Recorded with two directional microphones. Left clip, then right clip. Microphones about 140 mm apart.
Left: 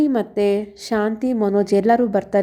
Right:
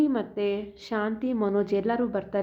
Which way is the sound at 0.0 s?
50° left (ahead or behind).